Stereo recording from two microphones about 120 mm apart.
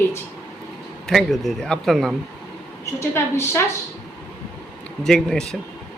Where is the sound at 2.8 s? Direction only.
20° left (ahead or behind).